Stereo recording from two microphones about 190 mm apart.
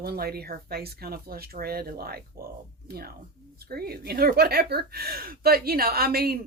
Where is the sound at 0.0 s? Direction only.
55° right (ahead or behind).